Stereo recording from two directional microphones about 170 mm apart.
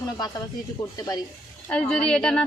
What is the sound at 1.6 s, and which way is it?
Speech, 5° left (ahead or behind).